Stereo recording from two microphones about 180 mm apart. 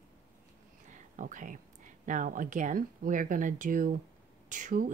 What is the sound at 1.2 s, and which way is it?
Speech, 45° right (ahead or behind).